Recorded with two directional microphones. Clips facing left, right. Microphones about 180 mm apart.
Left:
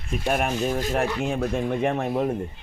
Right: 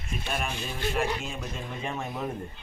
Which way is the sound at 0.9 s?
70° left (ahead or behind).